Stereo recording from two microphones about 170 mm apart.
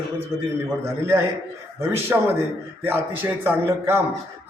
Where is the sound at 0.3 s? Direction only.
15° right (ahead or behind).